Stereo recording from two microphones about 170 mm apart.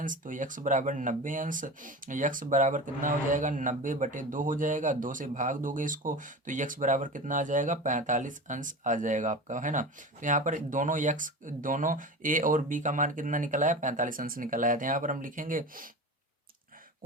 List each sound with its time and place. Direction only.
0.0 s speech: 50° right (ahead or behind)